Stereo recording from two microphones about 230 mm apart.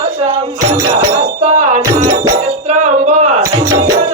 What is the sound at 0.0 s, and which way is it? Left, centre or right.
Music, right.